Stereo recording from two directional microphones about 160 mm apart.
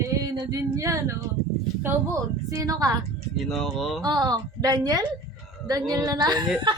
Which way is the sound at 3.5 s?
Centre (ahead or behind).